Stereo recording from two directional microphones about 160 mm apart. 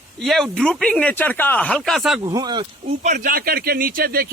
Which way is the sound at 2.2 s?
25° right (ahead or behind).